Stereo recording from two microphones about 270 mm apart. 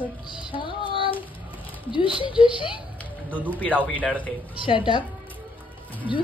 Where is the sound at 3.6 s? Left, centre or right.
Centre.